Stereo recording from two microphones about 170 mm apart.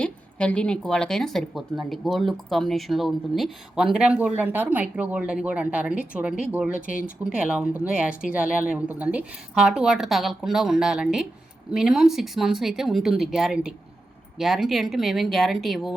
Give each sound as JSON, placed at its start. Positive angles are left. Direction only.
{"t": 0.0, "sound": "speech", "side_deg": 5}
{"t": 6.8, "sound": "speech", "side_deg": 55}
{"t": 7.3, "sound": "speech", "side_deg": -5}